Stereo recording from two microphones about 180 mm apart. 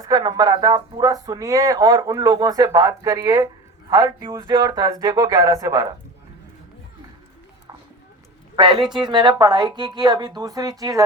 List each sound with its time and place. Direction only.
0.0 s speech: 20° right (ahead or behind)
8.5 s speech: 25° right (ahead or behind)